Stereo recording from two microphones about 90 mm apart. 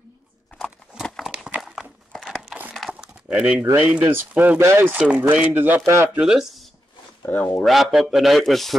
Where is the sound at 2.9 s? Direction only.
10° right (ahead or behind).